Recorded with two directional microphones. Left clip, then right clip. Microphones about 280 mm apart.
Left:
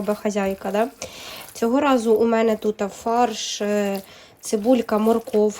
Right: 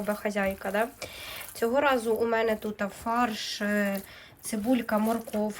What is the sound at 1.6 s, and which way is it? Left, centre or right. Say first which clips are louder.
Speech: left 6 dB; centre.